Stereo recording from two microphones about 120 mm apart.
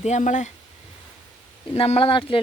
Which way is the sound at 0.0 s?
80° left.